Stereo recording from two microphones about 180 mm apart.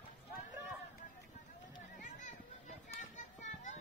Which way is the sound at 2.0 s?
40° left (ahead or behind).